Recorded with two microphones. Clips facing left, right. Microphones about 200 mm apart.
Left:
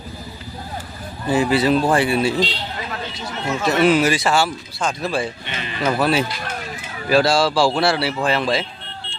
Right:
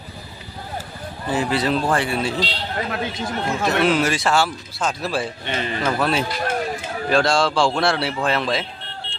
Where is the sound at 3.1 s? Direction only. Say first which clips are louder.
Right 1 dB; 50° right (ahead or behind).